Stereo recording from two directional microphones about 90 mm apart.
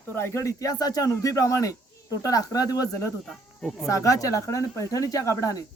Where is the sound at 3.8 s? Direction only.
40° left (ahead or behind).